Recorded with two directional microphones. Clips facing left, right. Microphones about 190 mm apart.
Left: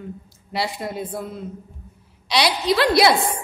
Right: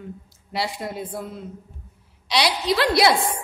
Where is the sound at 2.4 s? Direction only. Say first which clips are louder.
Left 2 dB; 60° left (ahead or behind).